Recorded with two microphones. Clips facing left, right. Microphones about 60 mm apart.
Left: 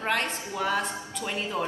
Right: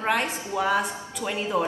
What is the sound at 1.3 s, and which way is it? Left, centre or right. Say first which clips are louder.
Speech: right 5 dB; centre.